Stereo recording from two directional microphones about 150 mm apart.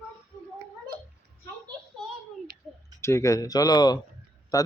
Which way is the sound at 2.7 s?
5° right (ahead or behind).